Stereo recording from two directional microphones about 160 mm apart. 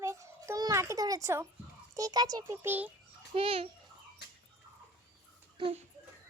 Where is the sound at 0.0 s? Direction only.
20° right (ahead or behind).